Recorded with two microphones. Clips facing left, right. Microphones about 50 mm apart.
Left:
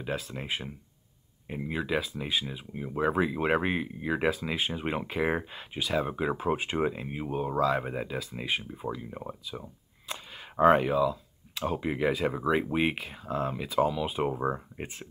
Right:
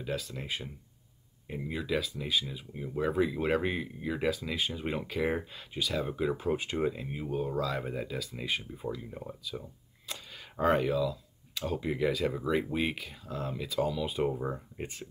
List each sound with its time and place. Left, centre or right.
0.0 s speech: left
14.3 s speech: left